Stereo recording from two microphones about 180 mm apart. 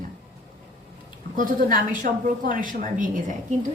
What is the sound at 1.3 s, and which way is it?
A woman's voice, 50° right (ahead or behind).